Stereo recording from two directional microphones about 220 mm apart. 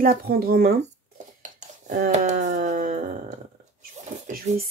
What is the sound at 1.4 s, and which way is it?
Dishes, 35° right (ahead or behind).